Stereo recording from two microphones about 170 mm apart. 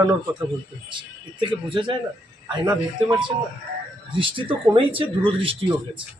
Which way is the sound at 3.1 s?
25° right (ahead or behind).